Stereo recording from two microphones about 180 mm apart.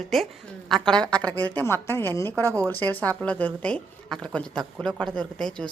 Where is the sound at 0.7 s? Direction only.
5° left (ahead or behind).